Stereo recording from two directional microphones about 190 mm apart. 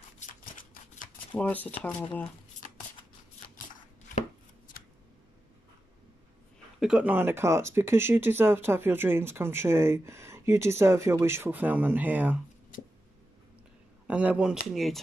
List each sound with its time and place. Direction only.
0.2 s shuffling cards: 45° left (ahead or behind)
1.3 s speech: 10° left (ahead or behind)
6.8 s speech: 5° right (ahead or behind)
14.0 s speech: 5° right (ahead or behind)